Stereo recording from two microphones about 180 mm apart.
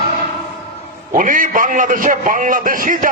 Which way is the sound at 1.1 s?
45° right (ahead or behind).